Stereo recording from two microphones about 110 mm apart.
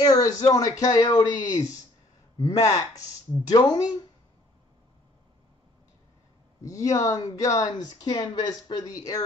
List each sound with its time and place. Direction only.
0.0 s speech: 35° left (ahead or behind)
6.6 s speech: 30° left (ahead or behind)